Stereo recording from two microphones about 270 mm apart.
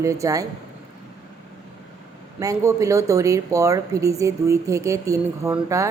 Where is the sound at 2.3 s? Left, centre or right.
Centre.